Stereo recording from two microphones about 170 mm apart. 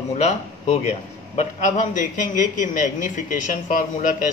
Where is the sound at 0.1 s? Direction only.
40° left (ahead or behind).